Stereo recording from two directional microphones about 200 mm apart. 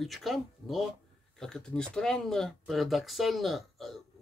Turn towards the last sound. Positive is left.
turn(degrees=0)  # may be behind; listen again after turning